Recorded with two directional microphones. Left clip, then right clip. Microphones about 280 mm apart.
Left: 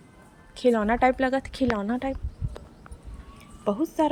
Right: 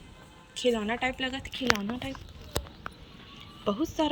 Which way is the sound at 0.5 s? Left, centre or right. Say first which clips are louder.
Left 5 dB; centre.